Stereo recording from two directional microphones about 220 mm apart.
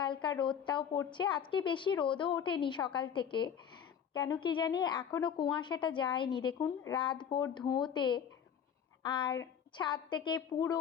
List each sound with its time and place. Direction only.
0.0 s a woman's voice: 20° left (ahead or behind)